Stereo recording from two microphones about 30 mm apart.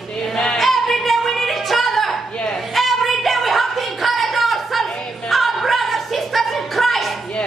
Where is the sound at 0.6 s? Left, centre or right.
Centre.